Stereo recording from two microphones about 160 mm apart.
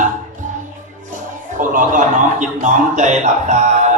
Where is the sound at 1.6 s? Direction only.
55° right (ahead or behind).